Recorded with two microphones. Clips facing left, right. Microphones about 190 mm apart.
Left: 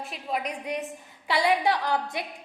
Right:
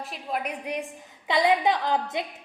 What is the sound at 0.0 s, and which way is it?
A woman's voice, centre (ahead or behind).